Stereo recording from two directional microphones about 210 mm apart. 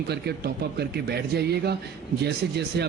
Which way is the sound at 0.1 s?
50° right (ahead or behind).